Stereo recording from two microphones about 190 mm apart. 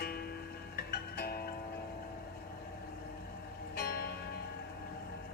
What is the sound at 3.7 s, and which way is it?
Music, 55° left (ahead or behind).